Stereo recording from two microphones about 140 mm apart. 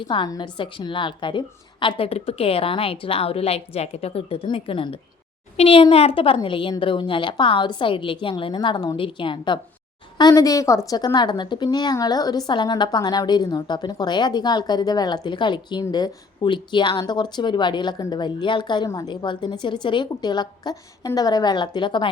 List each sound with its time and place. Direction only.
0.1 s a woman's voice: 35° left (ahead or behind)